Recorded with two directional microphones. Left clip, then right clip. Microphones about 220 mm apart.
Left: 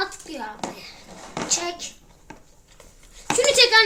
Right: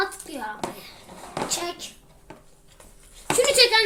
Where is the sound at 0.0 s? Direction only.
5° left (ahead or behind).